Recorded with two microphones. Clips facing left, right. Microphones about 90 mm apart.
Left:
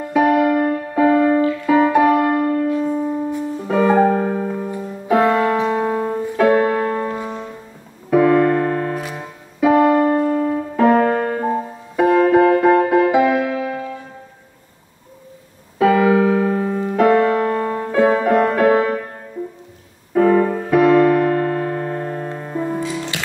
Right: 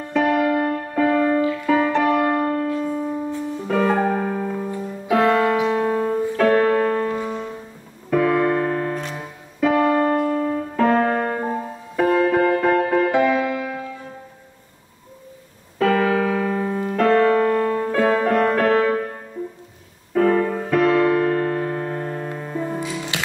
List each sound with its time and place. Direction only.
0.0 s music: 10° left (ahead or behind)
2.7 s piano: 10° left (ahead or behind)
5.1 s music: 15° left (ahead or behind)
5.7 s piano: 10° left (ahead or behind)
11.5 s music: 15° left (ahead or behind)
15.8 s music: 10° left (ahead or behind)
20.2 s music: 10° left (ahead or behind)
20.5 s piano: 5° left (ahead or behind)
22.4 s music: 15° left (ahead or behind)